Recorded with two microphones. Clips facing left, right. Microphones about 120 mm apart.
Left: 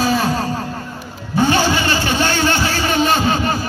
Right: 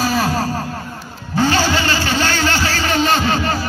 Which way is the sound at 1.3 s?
20° left (ahead or behind).